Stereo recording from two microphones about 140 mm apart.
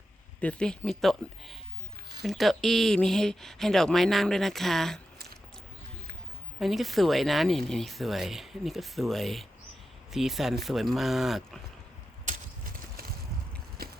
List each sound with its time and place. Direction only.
0.4 s speech: 5° left (ahead or behind)
6.6 s speech: centre (ahead or behind)
13.8 s biting: 90° right